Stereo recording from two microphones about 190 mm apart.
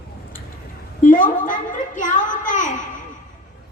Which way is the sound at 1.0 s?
45° left (ahead or behind).